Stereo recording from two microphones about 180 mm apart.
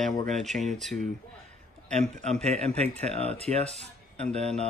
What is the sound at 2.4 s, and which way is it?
A man's voice, 35° right (ahead or behind).